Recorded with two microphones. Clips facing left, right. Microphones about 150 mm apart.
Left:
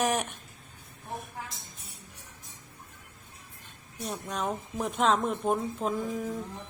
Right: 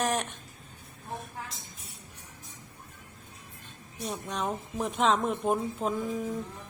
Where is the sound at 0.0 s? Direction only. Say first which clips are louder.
Left 1 dB; 10° left (ahead or behind).